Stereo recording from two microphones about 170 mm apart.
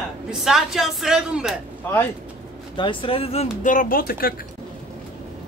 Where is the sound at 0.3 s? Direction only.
Centre (ahead or behind).